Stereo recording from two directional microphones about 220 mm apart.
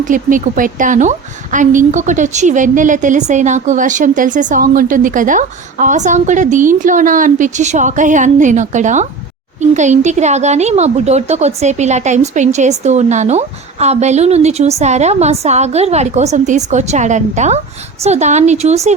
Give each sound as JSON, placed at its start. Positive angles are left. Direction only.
{"t": 0.0, "sound": "a woman's voice", "side_deg": -35}